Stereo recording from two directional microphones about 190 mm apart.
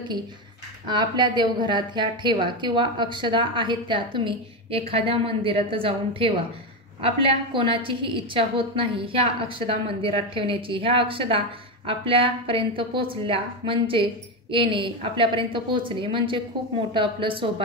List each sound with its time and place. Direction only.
0.8 s a woman's voice: 25° right (ahead or behind)